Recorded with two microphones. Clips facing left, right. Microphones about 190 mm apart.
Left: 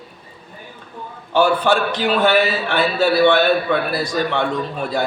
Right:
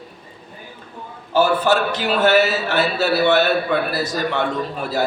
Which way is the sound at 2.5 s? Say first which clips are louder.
Even; 45° right (ahead or behind).